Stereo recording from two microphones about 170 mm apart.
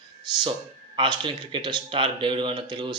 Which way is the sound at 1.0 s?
30° right (ahead or behind).